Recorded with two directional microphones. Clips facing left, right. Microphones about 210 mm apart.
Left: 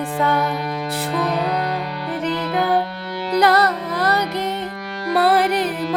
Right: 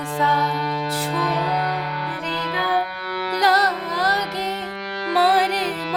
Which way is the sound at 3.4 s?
60° left (ahead or behind).